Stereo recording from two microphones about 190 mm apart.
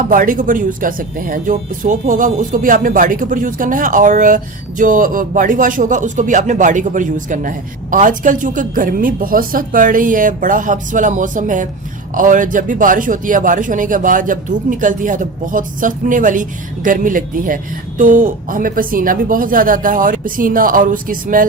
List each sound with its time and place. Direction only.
0.1 s speech: 45° right (ahead or behind)